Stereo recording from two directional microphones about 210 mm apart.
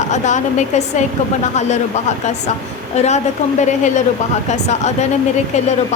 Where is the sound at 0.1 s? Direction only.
35° left (ahead or behind).